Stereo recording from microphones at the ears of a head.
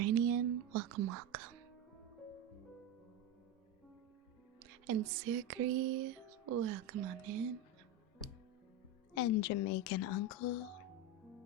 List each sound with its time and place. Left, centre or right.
0.0 s music: right
4.6 s music: right
9.1 s speech: left
10.7 s music: right